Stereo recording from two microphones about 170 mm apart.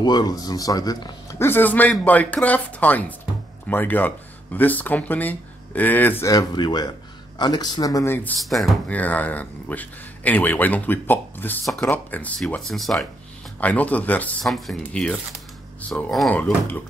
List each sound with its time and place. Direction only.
0.0 s speech: 25° left (ahead or behind)
8.5 s speech: centre (ahead or behind)